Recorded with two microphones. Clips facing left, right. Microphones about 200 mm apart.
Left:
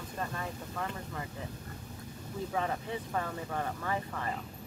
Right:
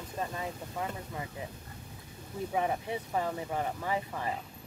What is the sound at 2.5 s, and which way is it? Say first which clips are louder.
Speech: right 3 dB; 15° right (ahead or behind).